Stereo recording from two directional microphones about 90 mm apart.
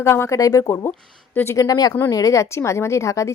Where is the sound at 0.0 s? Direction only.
30° left (ahead or behind).